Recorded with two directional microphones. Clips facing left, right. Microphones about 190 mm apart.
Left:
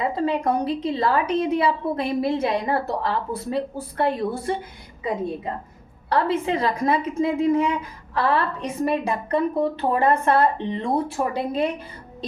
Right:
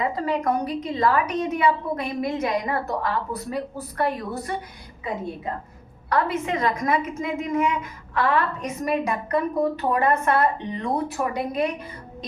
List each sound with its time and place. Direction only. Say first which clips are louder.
0.0 s a woman's voice: left 2 dB; 25° left (ahead or behind)
6.1 s a woman's voice: left 2 dB; 30° left (ahead or behind)